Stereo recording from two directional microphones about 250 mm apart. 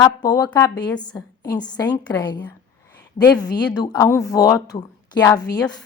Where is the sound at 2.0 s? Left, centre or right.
Centre.